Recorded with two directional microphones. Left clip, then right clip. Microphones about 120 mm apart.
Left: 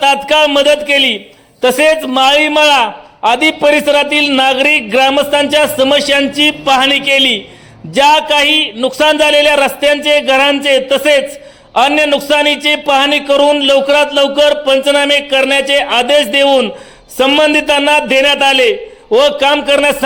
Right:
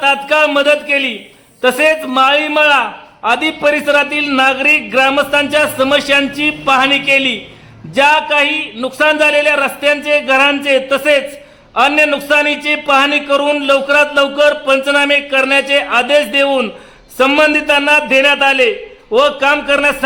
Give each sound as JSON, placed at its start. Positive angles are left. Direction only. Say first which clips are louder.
{"t": 0.0, "sound": "a man's voice", "louder": "left 2 dB", "side_deg": 25}